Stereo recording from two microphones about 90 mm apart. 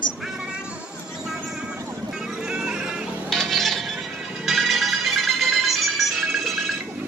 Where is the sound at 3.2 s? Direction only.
Centre (ahead or behind).